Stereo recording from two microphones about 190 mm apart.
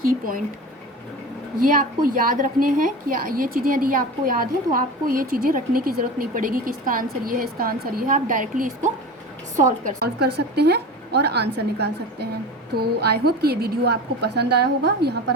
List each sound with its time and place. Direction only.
0.0 s a woman's voice: 45° right (ahead or behind)
1.5 s a woman's voice: 45° right (ahead or behind)
10.0 s a woman's voice: 55° right (ahead or behind)